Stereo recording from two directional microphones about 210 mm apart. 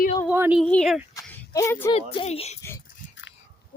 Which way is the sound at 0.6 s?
5° left (ahead or behind).